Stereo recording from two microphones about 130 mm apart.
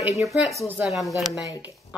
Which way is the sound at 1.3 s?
30° left (ahead or behind).